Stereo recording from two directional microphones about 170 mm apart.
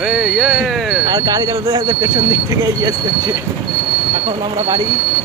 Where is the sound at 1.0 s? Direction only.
20° right (ahead or behind).